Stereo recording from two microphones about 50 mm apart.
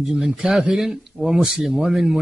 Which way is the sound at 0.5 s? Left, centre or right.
Centre.